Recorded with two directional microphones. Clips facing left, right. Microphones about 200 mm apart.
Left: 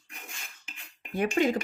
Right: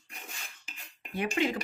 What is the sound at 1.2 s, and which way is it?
Speech, 45° left (ahead or behind).